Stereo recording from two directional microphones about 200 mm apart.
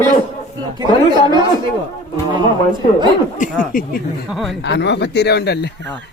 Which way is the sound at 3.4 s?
40° left (ahead or behind).